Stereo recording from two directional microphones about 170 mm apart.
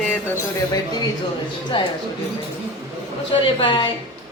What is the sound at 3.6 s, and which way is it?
Speech, 30° left (ahead or behind).